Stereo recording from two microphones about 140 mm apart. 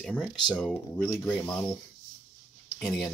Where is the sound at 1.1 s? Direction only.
15° left (ahead or behind).